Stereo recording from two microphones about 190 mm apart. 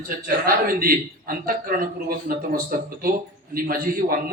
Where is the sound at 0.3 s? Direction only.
50° right (ahead or behind).